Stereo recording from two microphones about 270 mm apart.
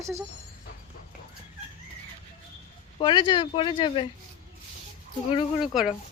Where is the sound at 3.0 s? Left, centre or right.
Centre.